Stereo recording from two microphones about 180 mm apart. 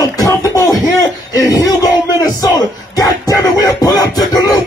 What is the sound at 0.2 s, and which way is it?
Music, 20° left (ahead or behind).